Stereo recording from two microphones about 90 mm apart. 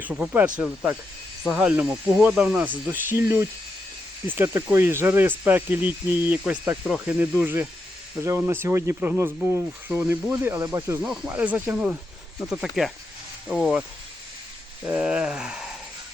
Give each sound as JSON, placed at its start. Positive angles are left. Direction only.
{"t": 0.6, "sound": "speech", "side_deg": -10}
{"t": 11.0, "sound": "speech", "side_deg": -10}
{"t": 12.4, "sound": "speech", "side_deg": -5}
{"t": 14.8, "sound": "speech", "side_deg": -15}